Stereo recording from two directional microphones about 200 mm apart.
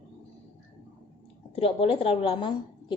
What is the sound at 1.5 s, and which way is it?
A woman's voice, 30° left (ahead or behind).